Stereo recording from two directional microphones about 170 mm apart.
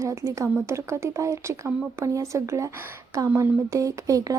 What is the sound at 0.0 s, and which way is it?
A woman's voice, 20° right (ahead or behind).